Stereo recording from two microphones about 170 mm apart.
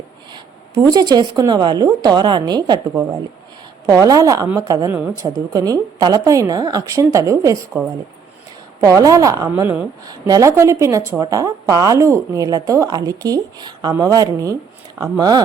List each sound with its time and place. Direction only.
0.3 s a woman's voice: 25° right (ahead or behind)
8.8 s a woman's voice: 20° right (ahead or behind)